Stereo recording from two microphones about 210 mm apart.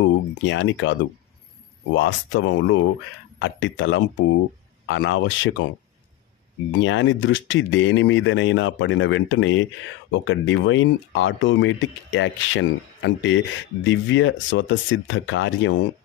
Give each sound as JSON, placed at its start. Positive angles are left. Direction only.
{"t": 0.3, "sound": "speech", "side_deg": 60}
{"t": 2.0, "sound": "speech", "side_deg": 65}
{"t": 6.7, "sound": "speech", "side_deg": 65}